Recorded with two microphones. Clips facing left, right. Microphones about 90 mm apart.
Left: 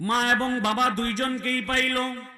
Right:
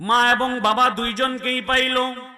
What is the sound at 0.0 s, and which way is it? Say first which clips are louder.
A man's voice: right 6 dB; 55° right (ahead or behind).